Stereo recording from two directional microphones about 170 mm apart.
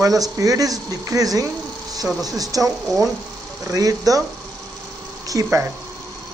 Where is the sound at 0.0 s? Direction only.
20° right (ahead or behind).